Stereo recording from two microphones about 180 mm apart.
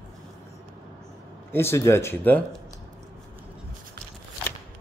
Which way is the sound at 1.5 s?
15° left (ahead or behind).